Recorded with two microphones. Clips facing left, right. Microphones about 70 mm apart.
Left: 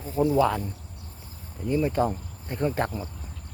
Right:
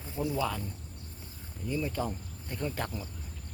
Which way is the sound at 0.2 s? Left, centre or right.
Left.